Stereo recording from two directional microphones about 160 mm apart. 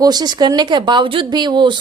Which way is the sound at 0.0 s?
25° right (ahead or behind).